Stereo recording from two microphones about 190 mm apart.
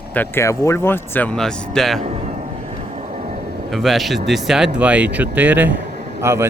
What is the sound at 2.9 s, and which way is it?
Vehicle, 35° right (ahead or behind).